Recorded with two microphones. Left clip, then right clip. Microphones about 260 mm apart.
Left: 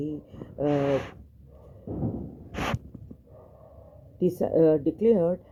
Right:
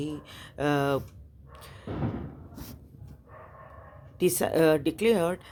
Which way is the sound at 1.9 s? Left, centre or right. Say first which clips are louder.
Left 1 dB; right.